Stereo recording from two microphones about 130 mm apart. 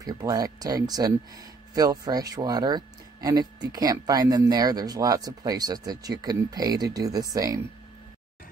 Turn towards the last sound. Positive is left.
turn(degrees=-30)  # may be behind; listen again after turning